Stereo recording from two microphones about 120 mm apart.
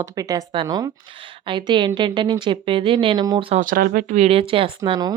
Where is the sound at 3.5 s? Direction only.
60° right (ahead or behind).